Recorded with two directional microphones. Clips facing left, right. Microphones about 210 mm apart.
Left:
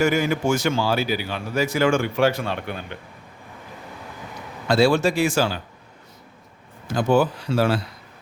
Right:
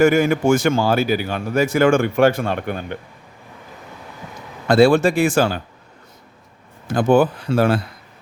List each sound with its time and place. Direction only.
0.0 s a man's voice: 50° right (ahead or behind)
4.7 s a man's voice: 55° right (ahead or behind)
6.8 s a man's voice: 55° right (ahead or behind)